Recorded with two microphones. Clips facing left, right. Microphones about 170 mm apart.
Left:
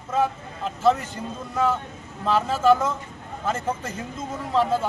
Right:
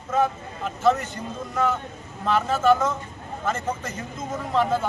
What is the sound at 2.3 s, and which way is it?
Speech, 30° left (ahead or behind).